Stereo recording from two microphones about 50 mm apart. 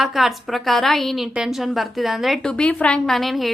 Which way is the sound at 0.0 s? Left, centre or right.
Centre.